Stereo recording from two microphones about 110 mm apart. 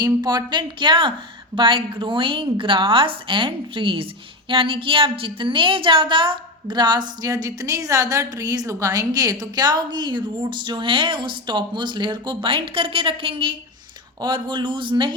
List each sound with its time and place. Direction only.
0.0 s a woman's voice: 40° right (ahead or behind)